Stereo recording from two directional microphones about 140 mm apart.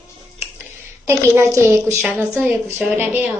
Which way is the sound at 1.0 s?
20° right (ahead or behind).